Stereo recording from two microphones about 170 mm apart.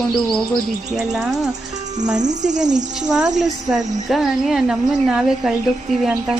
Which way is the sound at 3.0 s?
5° right (ahead or behind).